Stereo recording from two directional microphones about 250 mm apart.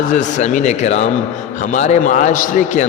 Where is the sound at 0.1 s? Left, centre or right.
Left.